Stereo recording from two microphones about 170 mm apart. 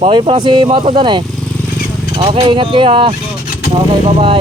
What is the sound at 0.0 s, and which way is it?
Speech, 30° right (ahead or behind).